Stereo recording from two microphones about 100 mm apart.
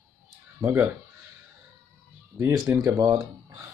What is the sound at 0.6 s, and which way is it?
Speech, 25° right (ahead or behind).